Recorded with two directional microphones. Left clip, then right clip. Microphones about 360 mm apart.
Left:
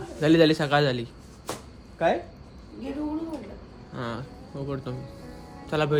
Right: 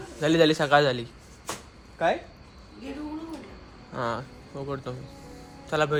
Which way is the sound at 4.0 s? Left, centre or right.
Centre.